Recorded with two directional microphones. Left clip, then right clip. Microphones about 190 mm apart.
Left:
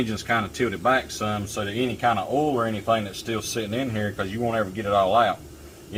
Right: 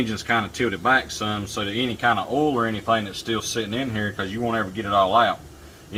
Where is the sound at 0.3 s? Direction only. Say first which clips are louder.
Right 1 dB; 5° left (ahead or behind).